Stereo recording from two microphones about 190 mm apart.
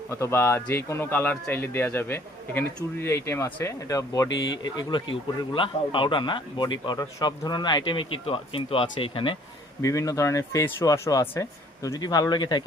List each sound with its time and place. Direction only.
0.1 s a man's voice: 15° left (ahead or behind)
9.8 s a man's voice: 15° left (ahead or behind)